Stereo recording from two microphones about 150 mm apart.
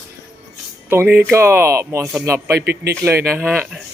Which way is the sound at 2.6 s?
90° right.